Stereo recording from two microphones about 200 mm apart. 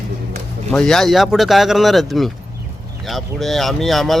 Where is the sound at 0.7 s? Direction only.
5° left (ahead or behind).